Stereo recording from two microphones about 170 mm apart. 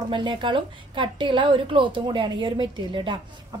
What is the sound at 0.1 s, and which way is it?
A woman's voice, 30° right (ahead or behind).